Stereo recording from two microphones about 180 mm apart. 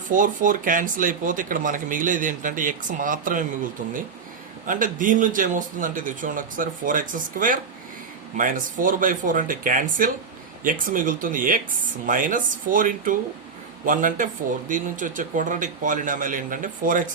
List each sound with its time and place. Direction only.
0.1 s speech: 45° right (ahead or behind)
4.6 s speech: 50° right (ahead or behind)